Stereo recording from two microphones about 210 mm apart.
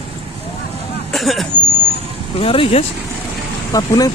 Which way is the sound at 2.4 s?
25° left (ahead or behind).